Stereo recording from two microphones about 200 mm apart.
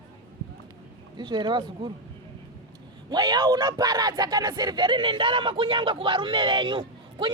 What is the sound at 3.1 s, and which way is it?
Speech, 20° right (ahead or behind).